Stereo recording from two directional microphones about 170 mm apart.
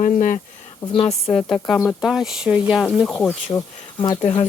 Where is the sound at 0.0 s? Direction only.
50° left (ahead or behind).